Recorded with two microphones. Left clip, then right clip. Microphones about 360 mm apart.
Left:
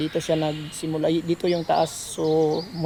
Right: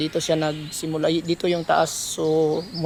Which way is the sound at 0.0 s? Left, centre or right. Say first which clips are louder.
Right 1 dB; centre.